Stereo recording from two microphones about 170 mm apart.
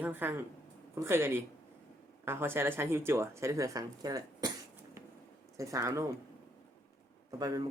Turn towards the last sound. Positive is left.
turn(degrees=-20)  # may be behind; listen again after turning